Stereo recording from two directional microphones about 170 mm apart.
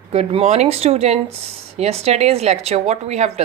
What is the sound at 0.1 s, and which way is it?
A woman's voice, 40° right (ahead or behind).